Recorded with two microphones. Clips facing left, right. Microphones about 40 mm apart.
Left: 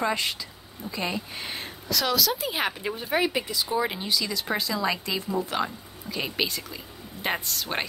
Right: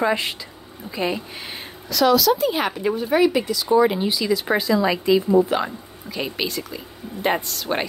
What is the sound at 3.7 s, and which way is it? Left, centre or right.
Speech, centre.